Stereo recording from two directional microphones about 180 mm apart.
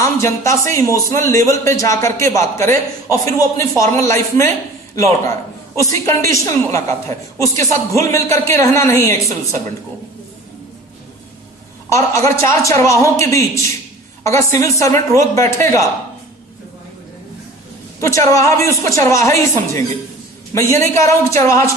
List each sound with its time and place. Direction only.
0.0 s a man's voice: 15° left (ahead or behind)
11.9 s a man's voice: 15° left (ahead or behind)
18.1 s a man's voice: 15° left (ahead or behind)